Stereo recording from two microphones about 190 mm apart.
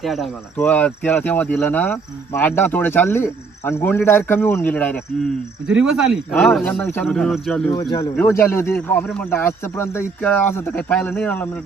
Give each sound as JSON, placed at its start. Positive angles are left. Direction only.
{"t": 0.0, "sound": "speech", "side_deg": 0}
{"t": 5.6, "sound": "speech", "side_deg": -5}
{"t": 7.8, "sound": "speech", "side_deg": 15}